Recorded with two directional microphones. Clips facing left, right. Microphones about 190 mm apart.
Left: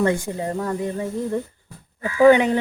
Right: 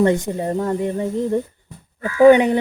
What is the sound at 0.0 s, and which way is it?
Speech, 20° right (ahead or behind).